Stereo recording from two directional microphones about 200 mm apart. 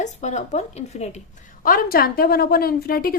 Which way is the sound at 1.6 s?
45° left (ahead or behind).